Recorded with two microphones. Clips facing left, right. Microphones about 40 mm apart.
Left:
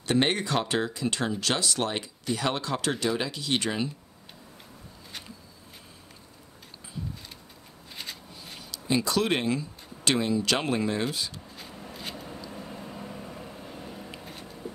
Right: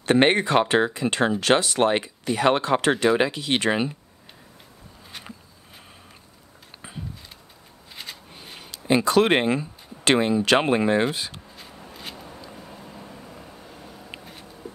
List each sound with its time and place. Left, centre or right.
0.0 s speech: right
7.9 s shuffling cards: centre
8.5 s speech: right
11.5 s a sound: centre
12.5 s vehicle: centre
14.2 s a sound: centre